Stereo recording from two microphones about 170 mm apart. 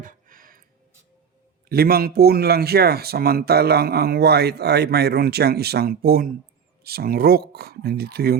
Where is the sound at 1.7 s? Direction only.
65° right (ahead or behind).